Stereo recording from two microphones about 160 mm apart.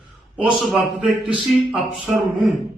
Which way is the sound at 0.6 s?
Centre (ahead or behind).